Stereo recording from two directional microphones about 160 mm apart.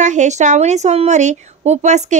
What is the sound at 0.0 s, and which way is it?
A woman's voice, 50° right (ahead or behind).